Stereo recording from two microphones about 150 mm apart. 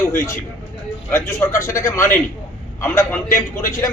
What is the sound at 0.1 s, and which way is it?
A man's voice, 20° left (ahead or behind).